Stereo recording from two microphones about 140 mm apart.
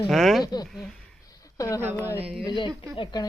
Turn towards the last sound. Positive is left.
turn(degrees=35)  # may be behind; listen again after turning